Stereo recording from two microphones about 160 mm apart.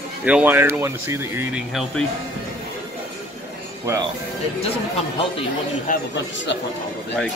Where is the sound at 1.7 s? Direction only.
Centre (ahead or behind).